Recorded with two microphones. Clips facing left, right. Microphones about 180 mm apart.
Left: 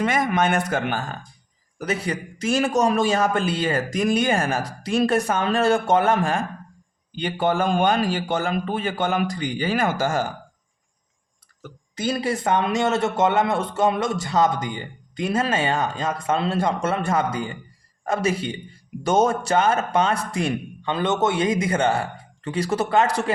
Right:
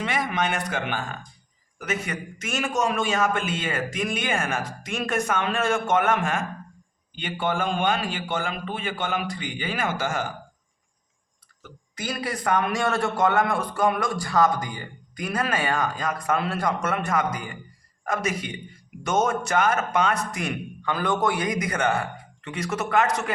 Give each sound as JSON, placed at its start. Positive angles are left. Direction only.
{"t": 0.0, "sound": "a man's voice", "side_deg": 45}
{"t": 11.9, "sound": "a man's voice", "side_deg": 25}